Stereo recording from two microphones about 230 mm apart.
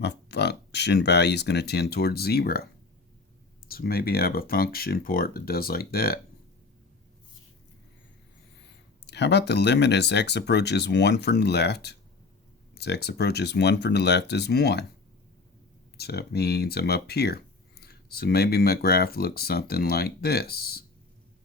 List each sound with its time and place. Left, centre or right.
0.0 s speech: left
3.7 s speech: left
9.0 s speech: left
16.0 s speech: left